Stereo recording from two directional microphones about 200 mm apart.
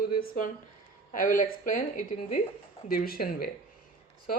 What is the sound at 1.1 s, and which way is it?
Speech, 40° left (ahead or behind).